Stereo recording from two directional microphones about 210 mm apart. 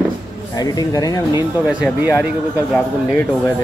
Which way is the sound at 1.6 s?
Centre (ahead or behind).